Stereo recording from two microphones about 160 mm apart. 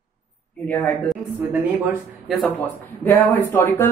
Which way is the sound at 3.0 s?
10° left (ahead or behind).